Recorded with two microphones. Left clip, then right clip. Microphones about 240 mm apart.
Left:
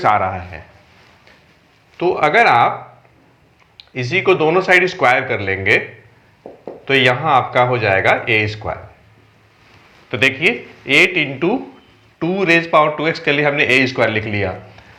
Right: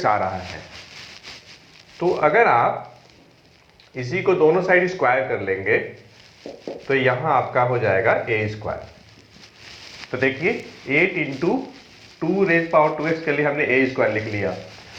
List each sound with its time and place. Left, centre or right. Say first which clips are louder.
0.0 s a man's voice: left 5 dB; left
2.0 s a man's voice: left 4 dB; left
4.0 s a man's voice: left 3 dB; left
6.8 s a man's voice: left 6 dB; left
10.1 s a man's voice: left 6 dB; left